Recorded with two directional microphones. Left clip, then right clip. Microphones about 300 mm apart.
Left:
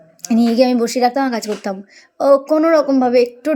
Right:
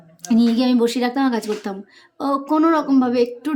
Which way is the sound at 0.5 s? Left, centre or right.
Centre.